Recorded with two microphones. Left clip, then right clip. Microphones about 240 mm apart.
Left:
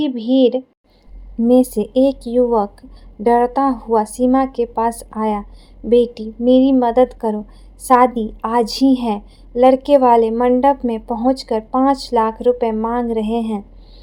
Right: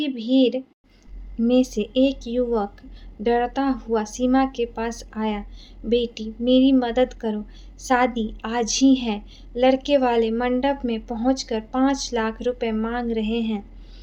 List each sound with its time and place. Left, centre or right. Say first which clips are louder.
0.0 s a woman's voice: left 6 dB; left